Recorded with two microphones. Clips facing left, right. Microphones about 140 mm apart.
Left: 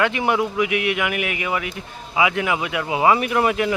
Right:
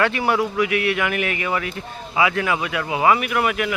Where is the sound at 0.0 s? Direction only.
20° left (ahead or behind).